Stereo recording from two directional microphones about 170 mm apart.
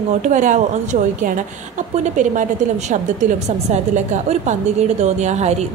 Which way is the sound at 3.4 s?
45° right (ahead or behind).